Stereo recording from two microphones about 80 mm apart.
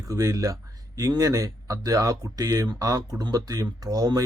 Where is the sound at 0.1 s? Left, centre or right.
Right.